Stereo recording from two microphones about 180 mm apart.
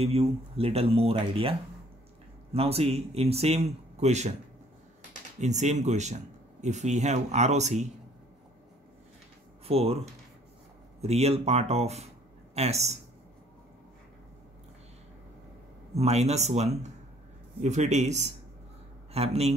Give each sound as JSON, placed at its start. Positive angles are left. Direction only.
{"t": 0.0, "sound": "speech", "side_deg": -35}
{"t": 5.4, "sound": "speech", "side_deg": -40}
{"t": 9.7, "sound": "speech", "side_deg": -35}
{"t": 11.0, "sound": "speech", "side_deg": -35}
{"t": 15.9, "sound": "speech", "side_deg": -35}